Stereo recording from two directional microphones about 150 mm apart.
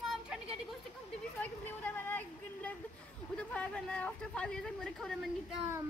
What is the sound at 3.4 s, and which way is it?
Speech, 10° left (ahead or behind).